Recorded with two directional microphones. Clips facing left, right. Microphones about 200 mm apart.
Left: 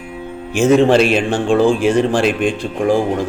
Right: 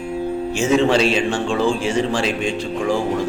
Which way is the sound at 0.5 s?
55° left (ahead or behind).